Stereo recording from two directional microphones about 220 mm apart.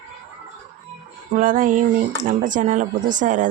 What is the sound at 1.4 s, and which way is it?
Speech, 40° right (ahead or behind).